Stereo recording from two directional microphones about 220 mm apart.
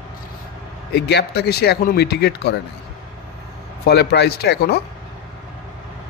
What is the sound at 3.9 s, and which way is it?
Speech, 50° left (ahead or behind).